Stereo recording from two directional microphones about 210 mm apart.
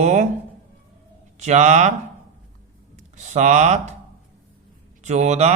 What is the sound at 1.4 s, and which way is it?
Speech, 35° right (ahead or behind).